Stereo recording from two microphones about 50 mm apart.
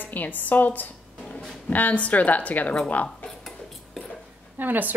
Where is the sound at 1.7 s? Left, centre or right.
Left.